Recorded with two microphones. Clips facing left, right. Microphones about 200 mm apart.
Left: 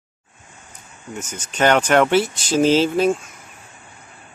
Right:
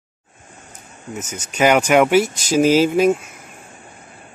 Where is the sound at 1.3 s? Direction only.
10° right (ahead or behind).